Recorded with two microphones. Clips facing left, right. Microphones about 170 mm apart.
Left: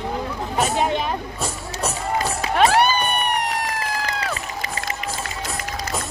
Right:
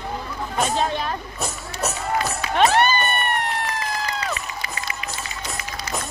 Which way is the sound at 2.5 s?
5° left (ahead or behind).